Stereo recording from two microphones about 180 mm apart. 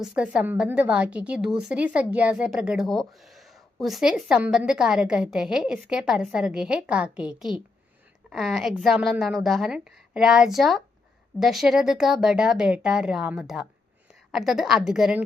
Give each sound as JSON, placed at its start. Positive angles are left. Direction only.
{"t": 0.0, "sound": "a woman's voice", "side_deg": -5}